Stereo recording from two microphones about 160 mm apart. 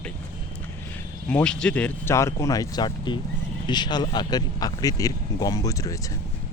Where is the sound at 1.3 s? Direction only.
5° left (ahead or behind).